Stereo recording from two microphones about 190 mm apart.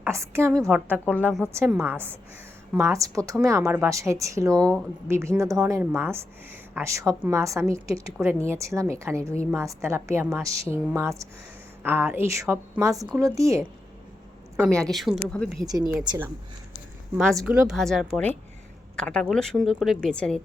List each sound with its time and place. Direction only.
0.0 s a woman's voice: 15° right (ahead or behind)
4.5 s a woman's voice: 5° left (ahead or behind)
5.0 s a woman's voice: 15° right (ahead or behind)
14.7 s a woman's voice: 5° left (ahead or behind)
15.6 s a woman's voice: 20° right (ahead or behind)
17.4 s a woman's voice: 5° right (ahead or behind)